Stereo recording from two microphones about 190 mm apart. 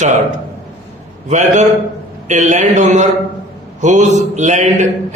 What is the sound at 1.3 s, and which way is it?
Speech, 40° right (ahead or behind).